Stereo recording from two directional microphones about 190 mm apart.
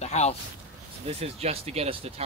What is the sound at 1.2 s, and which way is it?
Speech, 35° right (ahead or behind).